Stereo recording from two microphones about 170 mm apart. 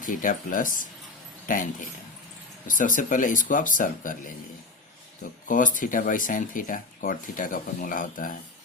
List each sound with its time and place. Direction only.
0.0 s speech: 50° left (ahead or behind)
2.6 s speech: 50° left (ahead or behind)
5.5 s speech: 50° left (ahead or behind)